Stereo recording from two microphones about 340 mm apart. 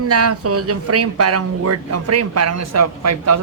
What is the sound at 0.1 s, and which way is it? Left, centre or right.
Speech, right.